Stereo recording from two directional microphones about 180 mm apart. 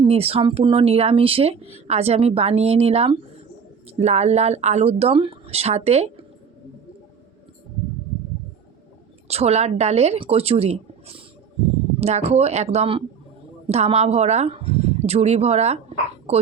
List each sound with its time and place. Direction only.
0.0 s speech: 35° right (ahead or behind)
9.2 s speech: 35° right (ahead or behind)